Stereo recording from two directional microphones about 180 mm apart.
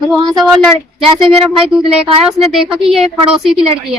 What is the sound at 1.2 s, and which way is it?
A woman's voice, 30° right (ahead or behind).